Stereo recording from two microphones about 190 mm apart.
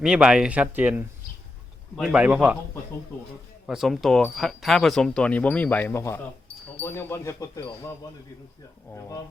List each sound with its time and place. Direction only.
0.0 s a man's voice: 5° right (ahead or behind)
3.7 s speech: centre (ahead or behind); by 7.7 s 15° left (ahead or behind)
8.9 s speech: 15° left (ahead or behind)